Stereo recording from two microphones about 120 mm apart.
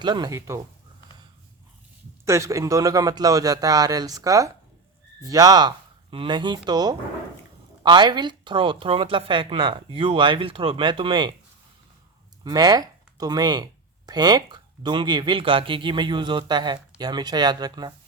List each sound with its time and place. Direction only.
0.0 s speech: 40° right (ahead or behind)
2.2 s a man's voice: 25° right (ahead or behind); by 11.3 s 45° right (ahead or behind)
12.4 s speech: 35° right (ahead or behind)